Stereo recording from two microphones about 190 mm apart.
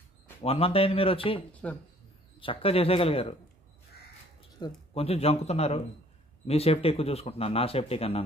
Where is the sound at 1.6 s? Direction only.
5° left (ahead or behind).